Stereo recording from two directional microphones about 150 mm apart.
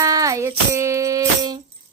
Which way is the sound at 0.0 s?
20° right (ahead or behind).